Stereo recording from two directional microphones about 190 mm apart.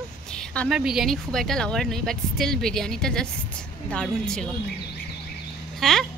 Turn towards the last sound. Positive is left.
turn(degrees=0)  # may be behind; listen again after turning